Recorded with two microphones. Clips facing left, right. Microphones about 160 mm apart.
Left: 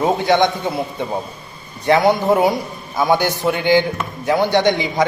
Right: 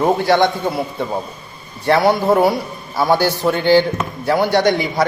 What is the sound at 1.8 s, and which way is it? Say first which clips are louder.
A man's voice: even; 15° left (ahead or behind).